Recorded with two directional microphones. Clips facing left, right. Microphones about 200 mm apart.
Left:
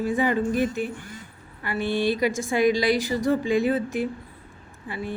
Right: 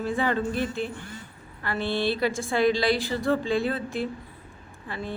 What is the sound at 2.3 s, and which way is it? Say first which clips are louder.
Speech: left 2 dB; 45° left (ahead or behind).